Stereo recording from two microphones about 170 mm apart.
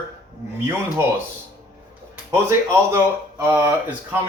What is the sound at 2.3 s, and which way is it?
Speech, 15° right (ahead or behind).